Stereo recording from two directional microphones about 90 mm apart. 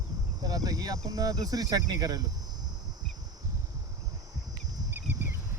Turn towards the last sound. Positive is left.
turn(degrees=-25)  # may be behind; listen again after turning